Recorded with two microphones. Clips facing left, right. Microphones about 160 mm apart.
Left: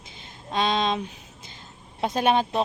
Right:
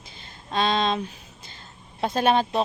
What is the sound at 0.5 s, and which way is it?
Speech, 15° left (ahead or behind).